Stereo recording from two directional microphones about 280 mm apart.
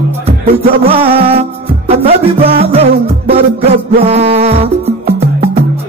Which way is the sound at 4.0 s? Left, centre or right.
Right.